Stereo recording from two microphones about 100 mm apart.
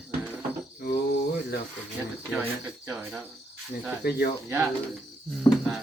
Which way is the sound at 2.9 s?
10° right (ahead or behind).